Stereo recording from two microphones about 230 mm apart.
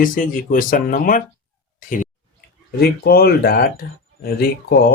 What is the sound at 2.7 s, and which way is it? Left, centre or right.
Speech, left.